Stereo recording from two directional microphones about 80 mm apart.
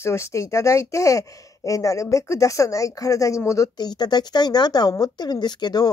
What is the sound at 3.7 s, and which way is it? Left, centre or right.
Speech, left.